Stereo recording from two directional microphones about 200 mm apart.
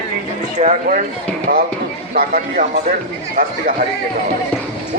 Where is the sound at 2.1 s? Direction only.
45° right (ahead or behind).